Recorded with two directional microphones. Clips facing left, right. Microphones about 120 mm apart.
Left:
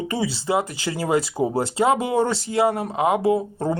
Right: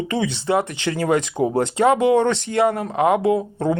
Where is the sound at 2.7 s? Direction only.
15° left (ahead or behind).